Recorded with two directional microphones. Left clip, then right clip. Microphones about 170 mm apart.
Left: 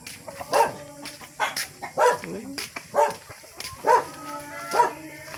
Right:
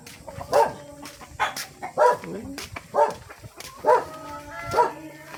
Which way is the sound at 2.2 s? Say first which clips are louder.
Left 1 dB; centre (ahead or behind).